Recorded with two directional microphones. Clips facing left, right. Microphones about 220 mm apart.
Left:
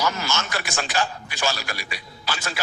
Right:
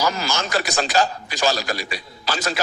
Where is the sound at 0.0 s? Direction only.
35° right (ahead or behind).